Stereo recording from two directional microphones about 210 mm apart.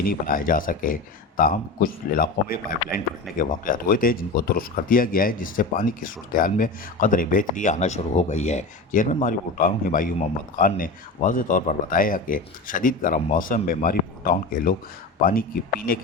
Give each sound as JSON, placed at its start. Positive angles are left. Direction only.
{"t": 0.0, "sound": "speech", "side_deg": 40}